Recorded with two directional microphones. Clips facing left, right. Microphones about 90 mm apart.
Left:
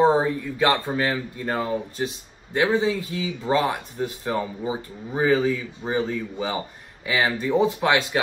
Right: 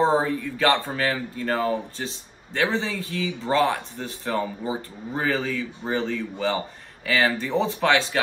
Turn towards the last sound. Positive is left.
turn(degrees=15)  # may be behind; listen again after turning